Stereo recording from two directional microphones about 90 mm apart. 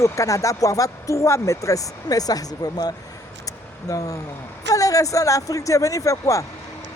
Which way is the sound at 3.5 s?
40° left (ahead or behind).